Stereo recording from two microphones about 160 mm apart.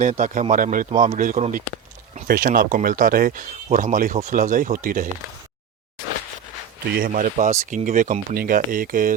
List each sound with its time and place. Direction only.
0.0 s a man's voice: 50° right (ahead or behind)
6.9 s speech: 60° right (ahead or behind)